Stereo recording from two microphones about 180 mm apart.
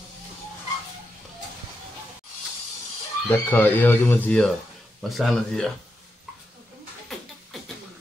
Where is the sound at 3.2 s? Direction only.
10° left (ahead or behind).